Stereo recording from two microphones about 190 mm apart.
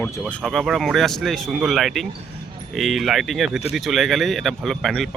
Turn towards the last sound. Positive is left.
turn(degrees=0)  # may be behind; listen again after turning